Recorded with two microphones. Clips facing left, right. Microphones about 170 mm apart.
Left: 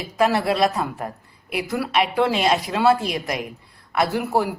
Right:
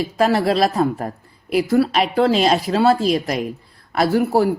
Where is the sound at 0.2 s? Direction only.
35° right (ahead or behind).